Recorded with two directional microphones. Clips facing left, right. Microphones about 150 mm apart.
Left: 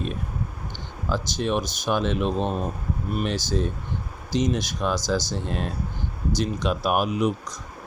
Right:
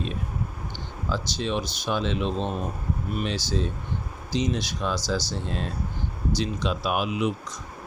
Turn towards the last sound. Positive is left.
turn(degrees=45)  # may be behind; listen again after turning